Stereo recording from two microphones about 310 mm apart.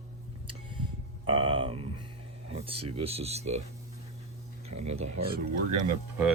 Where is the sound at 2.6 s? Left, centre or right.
Centre.